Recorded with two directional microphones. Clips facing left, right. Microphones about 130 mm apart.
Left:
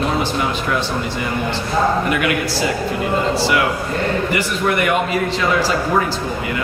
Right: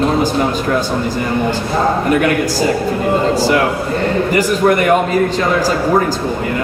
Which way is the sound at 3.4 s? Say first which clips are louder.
Right 4 dB; 40° right (ahead or behind).